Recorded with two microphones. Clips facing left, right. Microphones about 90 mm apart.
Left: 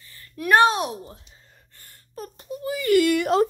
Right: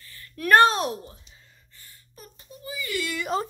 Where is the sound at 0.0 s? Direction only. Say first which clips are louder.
Right 1 dB; 25° left (ahead or behind).